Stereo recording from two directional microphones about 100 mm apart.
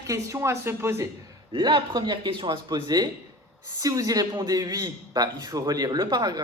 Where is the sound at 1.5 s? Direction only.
50° right (ahead or behind).